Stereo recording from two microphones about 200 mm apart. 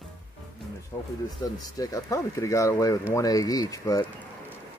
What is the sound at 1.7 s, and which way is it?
Speech, 15° left (ahead or behind).